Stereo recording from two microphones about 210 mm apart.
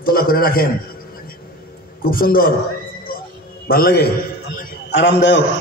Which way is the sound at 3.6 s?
45° left (ahead or behind).